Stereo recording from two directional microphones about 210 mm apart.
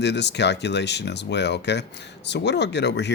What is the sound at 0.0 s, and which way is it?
Speech, 55° left (ahead or behind).